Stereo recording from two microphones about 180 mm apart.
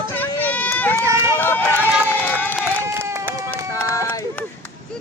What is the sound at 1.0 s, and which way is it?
Run, 15° right (ahead or behind).